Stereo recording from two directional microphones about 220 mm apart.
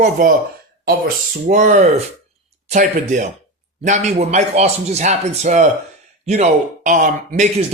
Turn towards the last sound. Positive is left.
turn(degrees=-35)  # may be behind; listen again after turning